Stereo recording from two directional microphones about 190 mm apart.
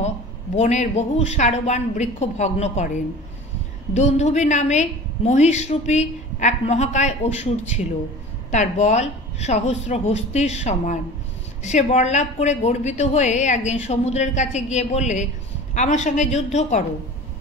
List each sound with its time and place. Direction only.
0.6 s a woman's voice: 35° left (ahead or behind)
3.9 s a woman's voice: 35° left (ahead or behind)